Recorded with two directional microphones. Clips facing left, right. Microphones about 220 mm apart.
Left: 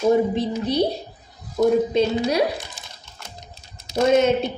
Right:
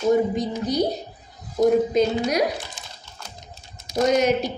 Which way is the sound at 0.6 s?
30° left (ahead or behind).